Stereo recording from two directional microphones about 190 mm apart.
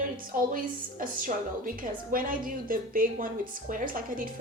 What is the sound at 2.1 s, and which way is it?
A woman's voice, 45° right (ahead or behind).